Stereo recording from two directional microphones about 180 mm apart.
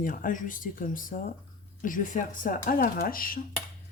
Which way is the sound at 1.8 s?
50° left (ahead or behind).